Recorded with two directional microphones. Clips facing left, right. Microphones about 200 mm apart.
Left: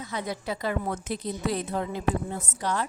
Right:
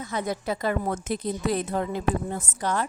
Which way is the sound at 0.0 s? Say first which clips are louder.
Right 3 dB; 45° right (ahead or behind).